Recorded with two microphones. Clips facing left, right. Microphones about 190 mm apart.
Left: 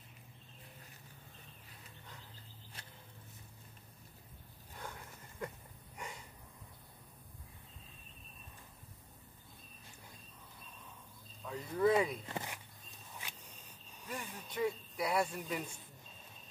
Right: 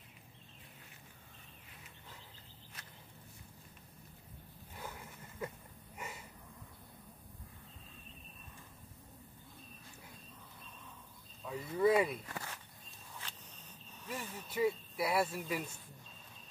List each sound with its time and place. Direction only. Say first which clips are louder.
4.7 s a sound: right 1 dB; 5° right (ahead or behind)
11.4 s speech: right 1 dB; 5° right (ahead or behind)
12.3 s walk: left 3 dB; 20° left (ahead or behind)
14.0 s speech: right 1 dB; 5° right (ahead or behind)